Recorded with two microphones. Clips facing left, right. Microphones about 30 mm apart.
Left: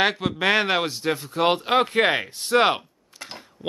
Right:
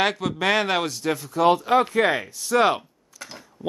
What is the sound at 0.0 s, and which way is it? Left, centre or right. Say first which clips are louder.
Speech: left 1 dB; centre.